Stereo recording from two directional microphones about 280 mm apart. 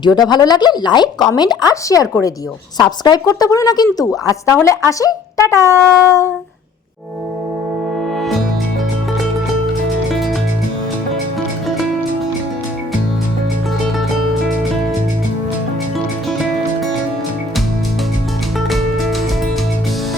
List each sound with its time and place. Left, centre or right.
0.2 s speech: centre
18.7 s music: centre